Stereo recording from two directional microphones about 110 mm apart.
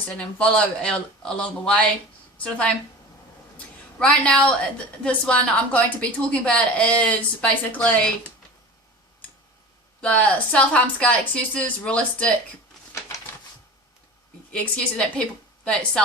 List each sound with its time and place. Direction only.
0.1 s a woman's voice: 10° left (ahead or behind)
3.9 s a woman's voice: 10° left (ahead or behind)
10.0 s a woman's voice: 10° left (ahead or behind)
13.3 s a sound: 30° left (ahead or behind)
14.5 s a woman's voice: 10° left (ahead or behind)